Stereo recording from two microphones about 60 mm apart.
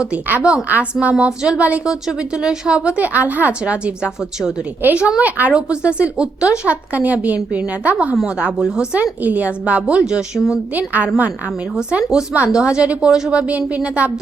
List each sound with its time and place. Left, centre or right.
0.3 s a woman's voice: right
1.1 s a woman's voice: centre
6.7 s a woman's voice: right
8.1 s speech: centre
9.2 s a woman's voice: right; by 10.5 s centre
10.8 s a woman's voice: right
11.7 s speech: centre
13.4 s a woman's voice: right